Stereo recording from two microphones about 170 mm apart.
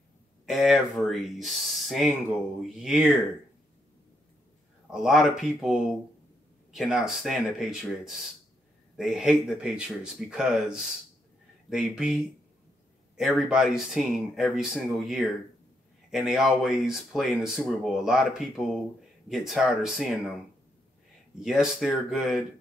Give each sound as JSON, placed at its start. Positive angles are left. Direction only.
{"t": 0.5, "sound": "speech", "side_deg": 0}
{"t": 4.9, "sound": "speech", "side_deg": -5}
{"t": 21.4, "sound": "speech", "side_deg": -5}